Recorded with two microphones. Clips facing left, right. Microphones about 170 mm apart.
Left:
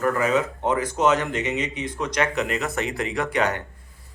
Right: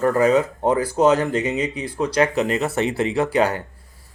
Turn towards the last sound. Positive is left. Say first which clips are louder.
# right 5 dB
turn(degrees=-30)  # may be behind; listen again after turning